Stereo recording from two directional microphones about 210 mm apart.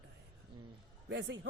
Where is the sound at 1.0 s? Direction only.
60° right (ahead or behind).